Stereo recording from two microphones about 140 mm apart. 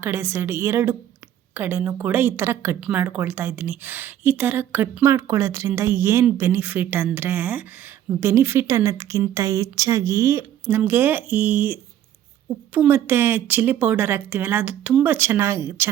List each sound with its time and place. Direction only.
0.0 s a woman's voice: 15° right (ahead or behind)